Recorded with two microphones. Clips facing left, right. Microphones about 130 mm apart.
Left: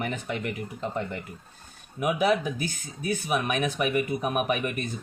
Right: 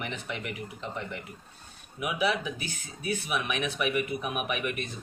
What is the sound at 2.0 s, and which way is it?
Speech, 45° left (ahead or behind).